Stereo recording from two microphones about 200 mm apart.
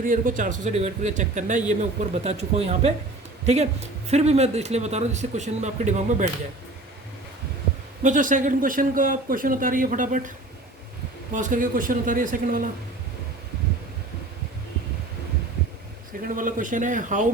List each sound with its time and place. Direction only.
0.0 s speech: 40° right (ahead or behind)
8.0 s speech: 40° right (ahead or behind)
11.3 s speech: 40° right (ahead or behind)
16.3 s speech: 40° right (ahead or behind)